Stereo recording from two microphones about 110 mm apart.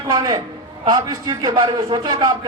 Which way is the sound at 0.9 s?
40° right (ahead or behind).